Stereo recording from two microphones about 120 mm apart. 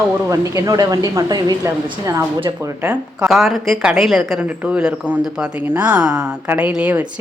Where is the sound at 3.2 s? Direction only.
5° right (ahead or behind).